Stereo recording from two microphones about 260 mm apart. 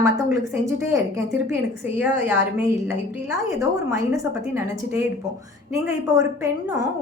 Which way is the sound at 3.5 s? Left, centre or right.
Centre.